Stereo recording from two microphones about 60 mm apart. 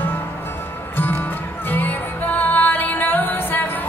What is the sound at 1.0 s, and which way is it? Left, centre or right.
Music, left.